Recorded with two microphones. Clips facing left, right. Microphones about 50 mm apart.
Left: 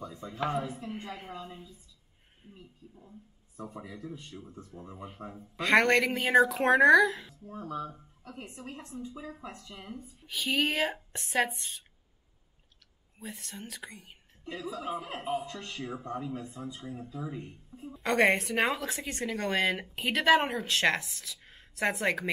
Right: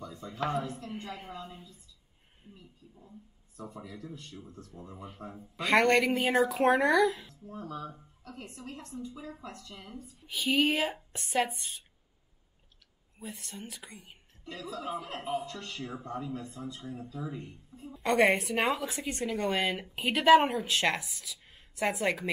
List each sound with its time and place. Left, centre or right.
0.0 s a woman's voice: centre
1.3 s a woman's voice: centre
2.9 s a woman's voice: centre
3.5 s a woman's voice: left
5.6 s a woman's voice: centre
7.4 s speech: left
8.2 s a woman's voice: centre
10.2 s a woman's voice: centre
13.2 s a woman's voice: centre
14.4 s a woman's voice: centre
17.9 s a woman's voice: centre